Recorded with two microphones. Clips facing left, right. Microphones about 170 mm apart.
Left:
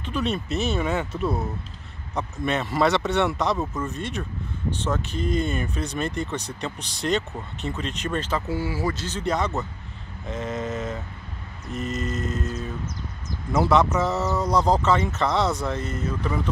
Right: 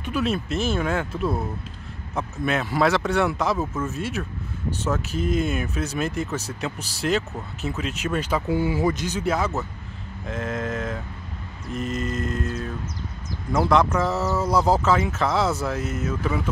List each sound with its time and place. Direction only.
0.0 s speech: 5° right (ahead or behind)